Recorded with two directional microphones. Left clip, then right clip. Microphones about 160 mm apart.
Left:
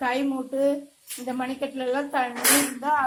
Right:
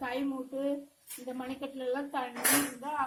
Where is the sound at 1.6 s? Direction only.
35° left (ahead or behind).